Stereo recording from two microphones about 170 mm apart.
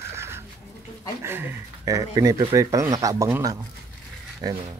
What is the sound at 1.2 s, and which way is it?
Speech, 15° right (ahead or behind).